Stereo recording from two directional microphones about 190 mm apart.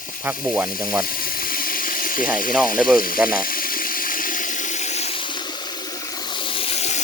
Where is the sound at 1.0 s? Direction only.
50° left (ahead or behind).